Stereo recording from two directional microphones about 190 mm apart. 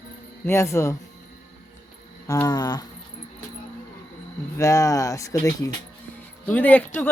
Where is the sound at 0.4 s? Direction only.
15° left (ahead or behind).